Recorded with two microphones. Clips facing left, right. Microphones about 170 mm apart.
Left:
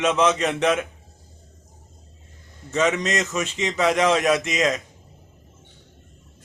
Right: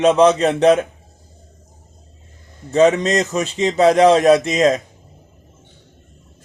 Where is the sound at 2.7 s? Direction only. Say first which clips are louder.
Right 8 dB; 35° right (ahead or behind).